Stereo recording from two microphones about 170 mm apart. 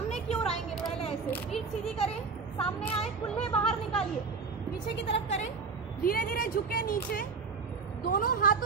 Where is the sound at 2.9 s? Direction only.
35° left (ahead or behind).